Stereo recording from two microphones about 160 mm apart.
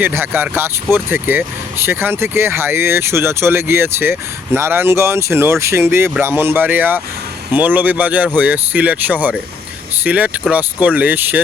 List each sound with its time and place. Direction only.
0.0 s speech: 15° right (ahead or behind)